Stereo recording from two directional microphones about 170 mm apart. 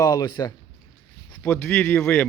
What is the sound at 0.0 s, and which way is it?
Speech, 20° left (ahead or behind).